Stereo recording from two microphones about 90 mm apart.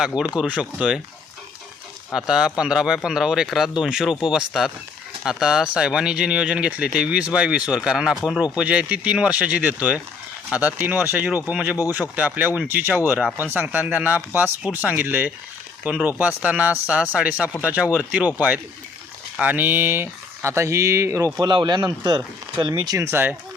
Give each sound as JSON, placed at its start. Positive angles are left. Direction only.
{"t": 0.3, "sound": "speech", "side_deg": -10}
{"t": 2.1, "sound": "speech", "side_deg": -5}
{"t": 21.4, "sound": "speech", "side_deg": -55}